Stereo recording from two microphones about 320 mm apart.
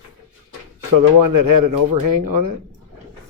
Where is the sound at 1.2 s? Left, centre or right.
Right.